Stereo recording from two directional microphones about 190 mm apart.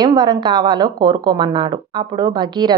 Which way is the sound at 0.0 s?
20° right (ahead or behind).